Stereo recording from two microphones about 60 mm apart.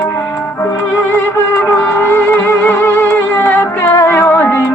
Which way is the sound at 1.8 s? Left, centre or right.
Left.